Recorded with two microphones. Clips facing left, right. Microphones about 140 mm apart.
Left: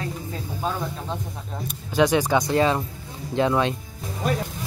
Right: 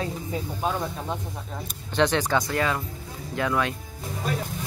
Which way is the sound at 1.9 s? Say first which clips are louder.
Left 3 dB; 10° left (ahead or behind).